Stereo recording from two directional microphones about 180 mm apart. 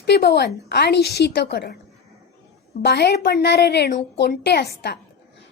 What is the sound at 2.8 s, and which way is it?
A woman's voice, 65° left (ahead or behind).